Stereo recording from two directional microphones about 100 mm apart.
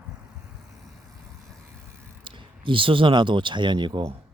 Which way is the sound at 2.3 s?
55° right (ahead or behind).